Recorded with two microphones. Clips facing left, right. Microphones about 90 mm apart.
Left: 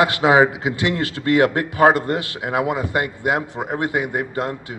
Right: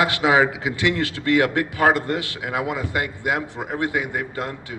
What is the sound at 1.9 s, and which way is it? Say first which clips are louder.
A man's voice: left 2 dB; 45° left (ahead or behind).